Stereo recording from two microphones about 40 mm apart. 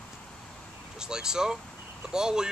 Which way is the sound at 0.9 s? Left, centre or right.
Centre.